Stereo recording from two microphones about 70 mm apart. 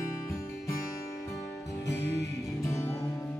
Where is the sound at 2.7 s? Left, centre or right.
Left.